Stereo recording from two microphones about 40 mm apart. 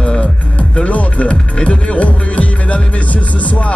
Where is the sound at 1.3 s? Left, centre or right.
Left.